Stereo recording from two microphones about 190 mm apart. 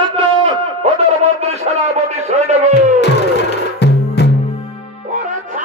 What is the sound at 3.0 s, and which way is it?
Music, 60° left (ahead or behind).